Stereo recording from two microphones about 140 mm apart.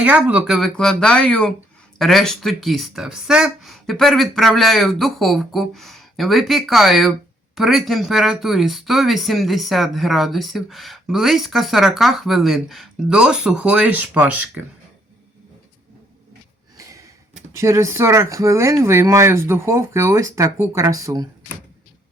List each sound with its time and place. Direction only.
0.0 s speech: 10° right (ahead or behind)
16.7 s sniff: 25° right (ahead or behind)
17.5 s speech: 20° right (ahead or behind)